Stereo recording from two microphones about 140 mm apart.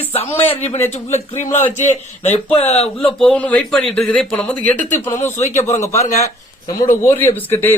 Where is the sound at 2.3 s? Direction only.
45° left (ahead or behind).